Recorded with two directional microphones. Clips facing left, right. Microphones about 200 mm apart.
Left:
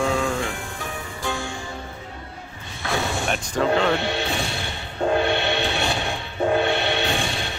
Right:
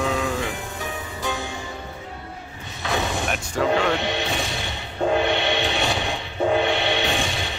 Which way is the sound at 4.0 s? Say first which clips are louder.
Even; 15° right (ahead or behind).